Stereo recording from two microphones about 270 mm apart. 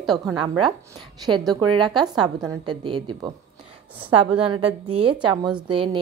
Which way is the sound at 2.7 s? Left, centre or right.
Centre.